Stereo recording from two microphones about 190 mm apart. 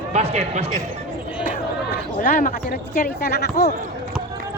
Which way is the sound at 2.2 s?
45° left (ahead or behind).